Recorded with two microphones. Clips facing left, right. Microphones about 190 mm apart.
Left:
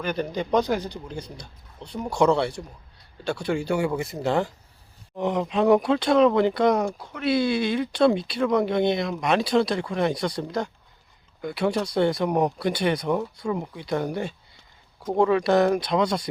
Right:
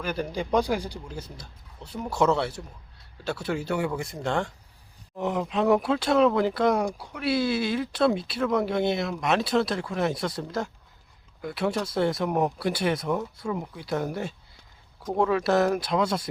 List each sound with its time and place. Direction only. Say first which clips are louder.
0.0 s speech: left 2 dB; 5° right (ahead or behind)